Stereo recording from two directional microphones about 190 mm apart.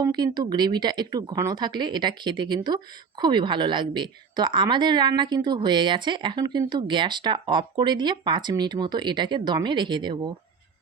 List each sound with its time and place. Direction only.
0.0 s speech: 20° right (ahead or behind)